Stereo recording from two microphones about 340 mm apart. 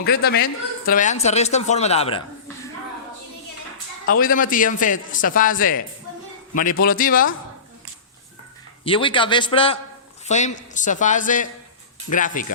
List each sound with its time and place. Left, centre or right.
0.0 s speech: left
4.0 s speech: left
8.8 s a man's voice: centre